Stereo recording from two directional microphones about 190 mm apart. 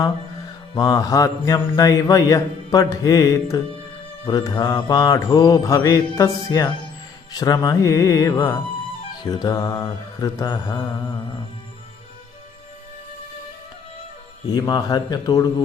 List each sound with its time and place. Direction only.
0.7 s mantra: 20° left (ahead or behind)
7.3 s speech: 20° left (ahead or behind)
9.3 s mantra: 20° left (ahead or behind)
14.5 s mantra: 20° left (ahead or behind)